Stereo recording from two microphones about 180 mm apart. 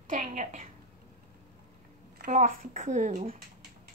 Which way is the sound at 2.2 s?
40° right (ahead or behind).